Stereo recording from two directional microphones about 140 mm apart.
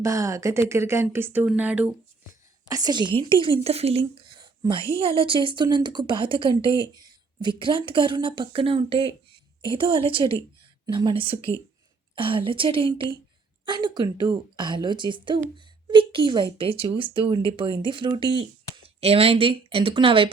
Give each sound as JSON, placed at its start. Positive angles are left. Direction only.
{"t": 0.0, "sound": "a woman's voice", "side_deg": -20}
{"t": 2.6, "sound": "speech", "side_deg": -25}